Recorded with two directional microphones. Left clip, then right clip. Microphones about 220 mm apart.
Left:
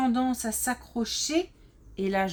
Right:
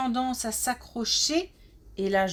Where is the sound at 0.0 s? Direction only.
25° right (ahead or behind).